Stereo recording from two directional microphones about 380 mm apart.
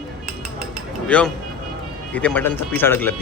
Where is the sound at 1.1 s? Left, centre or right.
Centre.